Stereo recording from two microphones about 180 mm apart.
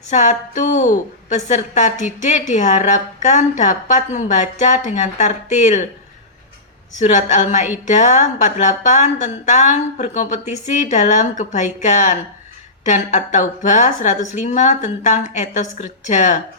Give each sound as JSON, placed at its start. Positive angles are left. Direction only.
{"t": 0.1, "sound": "a woman's voice", "side_deg": 40}
{"t": 7.0, "sound": "a woman's voice", "side_deg": 40}